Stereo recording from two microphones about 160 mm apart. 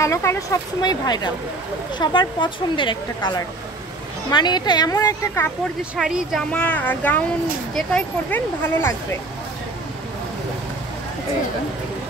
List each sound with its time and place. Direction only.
0.0 s a woman's voice: 15° left (ahead or behind)
5.9 s speech: centre (ahead or behind)
6.5 s speech: 10° left (ahead or behind)